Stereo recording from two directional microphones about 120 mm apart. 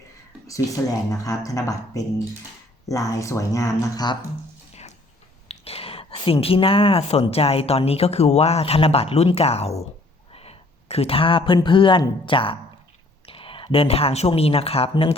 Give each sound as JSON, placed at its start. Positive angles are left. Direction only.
{"t": 0.4, "sound": "speech", "side_deg": 30}
{"t": 4.7, "sound": "a sound", "side_deg": 65}
{"t": 5.5, "sound": "a woman's voice", "side_deg": 55}